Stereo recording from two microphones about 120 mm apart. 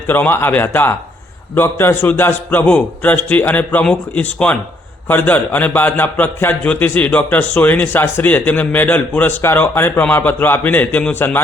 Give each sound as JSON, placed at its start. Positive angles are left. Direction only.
{"t": 0.1, "sound": "a man's voice", "side_deg": 15}